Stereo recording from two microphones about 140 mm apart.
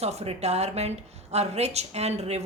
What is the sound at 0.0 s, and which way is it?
A woman's voice, 50° right (ahead or behind).